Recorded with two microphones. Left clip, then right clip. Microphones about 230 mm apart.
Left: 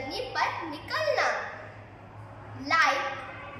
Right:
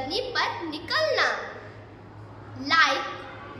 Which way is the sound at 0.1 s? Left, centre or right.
Centre.